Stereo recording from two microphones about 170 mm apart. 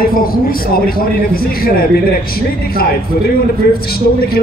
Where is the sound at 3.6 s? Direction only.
65° left (ahead or behind).